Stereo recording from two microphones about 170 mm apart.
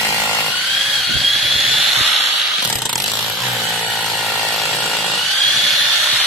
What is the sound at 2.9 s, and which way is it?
Ratchet, centre (ahead or behind).